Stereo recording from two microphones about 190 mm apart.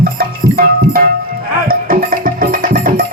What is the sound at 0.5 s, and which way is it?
Music, 50° right (ahead or behind).